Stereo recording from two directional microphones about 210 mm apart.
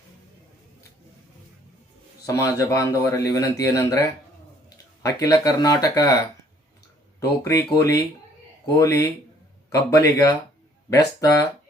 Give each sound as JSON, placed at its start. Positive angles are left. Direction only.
{"t": 2.2, "sound": "speech", "side_deg": 15}
{"t": 5.0, "sound": "speech", "side_deg": 15}
{"t": 7.2, "sound": "speech", "side_deg": 15}